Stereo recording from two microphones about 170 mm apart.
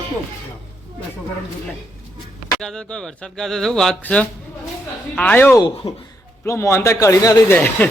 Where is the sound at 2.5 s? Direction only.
5° left (ahead or behind).